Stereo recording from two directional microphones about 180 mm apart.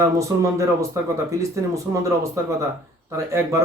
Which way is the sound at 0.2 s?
15° right (ahead or behind).